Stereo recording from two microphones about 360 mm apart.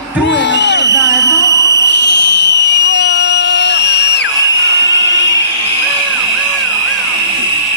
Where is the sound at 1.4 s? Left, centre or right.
Centre.